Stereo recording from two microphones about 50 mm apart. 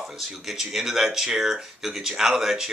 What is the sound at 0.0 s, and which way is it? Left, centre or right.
Speech, centre.